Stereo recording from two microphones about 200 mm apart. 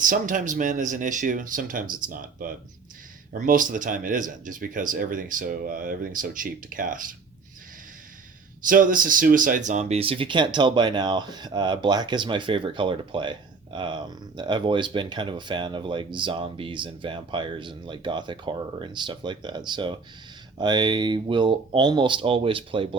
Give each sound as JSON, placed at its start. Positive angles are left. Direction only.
{"t": 0.0, "sound": "speech", "side_deg": -40}
{"t": 8.6, "sound": "speech", "side_deg": -40}